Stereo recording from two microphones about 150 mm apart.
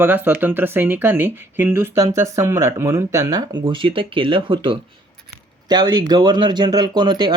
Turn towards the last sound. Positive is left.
turn(degrees=-30)  # may be behind; listen again after turning